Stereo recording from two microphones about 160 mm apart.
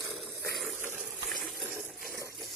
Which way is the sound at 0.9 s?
Centre (ahead or behind).